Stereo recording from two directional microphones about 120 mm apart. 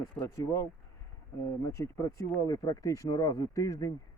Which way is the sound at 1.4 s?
25° left (ahead or behind).